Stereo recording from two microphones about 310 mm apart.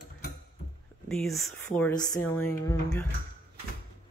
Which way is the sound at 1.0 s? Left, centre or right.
Centre.